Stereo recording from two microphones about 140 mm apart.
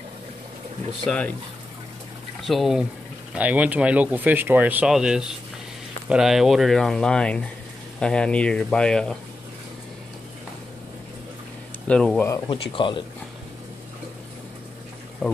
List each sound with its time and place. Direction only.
1.0 s speech: 5° left (ahead or behind)
2.4 s speech: centre (ahead or behind)
11.9 s speech: 5° left (ahead or behind)
12.4 s speech: 35° left (ahead or behind)
15.2 s speech: 10° left (ahead or behind)